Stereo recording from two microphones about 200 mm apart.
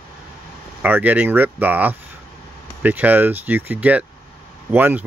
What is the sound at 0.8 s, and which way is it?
Speech, 10° right (ahead or behind).